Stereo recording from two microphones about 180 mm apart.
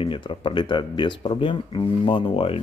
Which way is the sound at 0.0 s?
30° left (ahead or behind).